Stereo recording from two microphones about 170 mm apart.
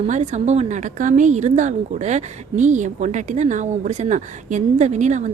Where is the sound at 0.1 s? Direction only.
40° right (ahead or behind).